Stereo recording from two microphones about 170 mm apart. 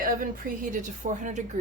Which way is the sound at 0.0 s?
55° right (ahead or behind).